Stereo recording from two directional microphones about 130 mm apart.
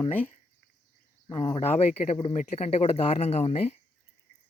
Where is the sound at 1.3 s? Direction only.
40° left (ahead or behind).